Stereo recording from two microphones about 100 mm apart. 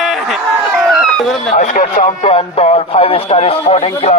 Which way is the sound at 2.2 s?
80° left.